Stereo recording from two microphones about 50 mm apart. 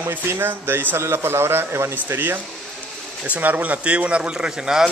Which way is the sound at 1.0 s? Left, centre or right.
Right.